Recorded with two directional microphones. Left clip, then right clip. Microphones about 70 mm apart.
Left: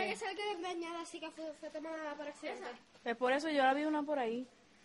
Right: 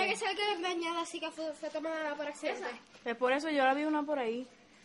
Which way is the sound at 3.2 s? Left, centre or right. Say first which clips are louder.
Right 3 dB; left.